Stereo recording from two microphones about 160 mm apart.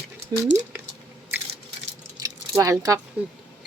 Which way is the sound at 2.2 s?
20° right (ahead or behind).